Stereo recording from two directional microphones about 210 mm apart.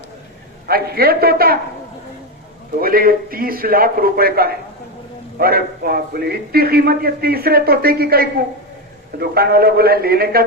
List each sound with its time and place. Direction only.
0.7 s a man's voice: 45° right (ahead or behind)
2.8 s a man's voice: 45° right (ahead or behind)